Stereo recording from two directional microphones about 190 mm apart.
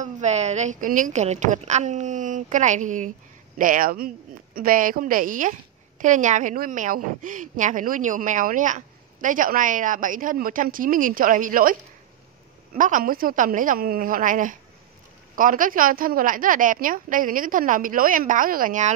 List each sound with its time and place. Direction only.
0.0 s a woman's voice: 35° right (ahead or behind)
12.7 s a woman's voice: 45° right (ahead or behind)